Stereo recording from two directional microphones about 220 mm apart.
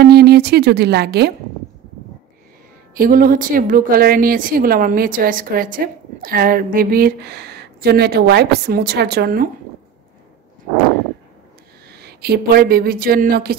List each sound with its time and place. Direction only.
0.0 s speech: 45° right (ahead or behind)
2.9 s a woman's voice: 40° right (ahead or behind)
11.9 s speech: 45° right (ahead or behind)